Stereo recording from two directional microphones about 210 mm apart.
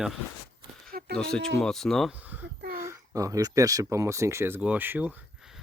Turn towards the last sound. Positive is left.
turn(degrees=-5)  # may be behind; listen again after turning